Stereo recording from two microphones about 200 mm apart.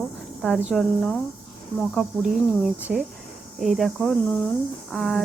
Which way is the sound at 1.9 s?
Centre (ahead or behind).